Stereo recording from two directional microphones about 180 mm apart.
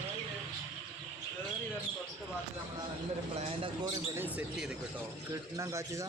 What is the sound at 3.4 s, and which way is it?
Speech, 25° right (ahead or behind).